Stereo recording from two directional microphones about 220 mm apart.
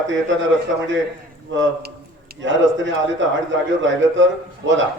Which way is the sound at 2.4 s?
55° right (ahead or behind).